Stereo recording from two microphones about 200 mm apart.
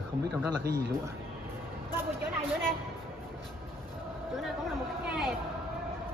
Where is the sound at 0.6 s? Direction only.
50° right (ahead or behind).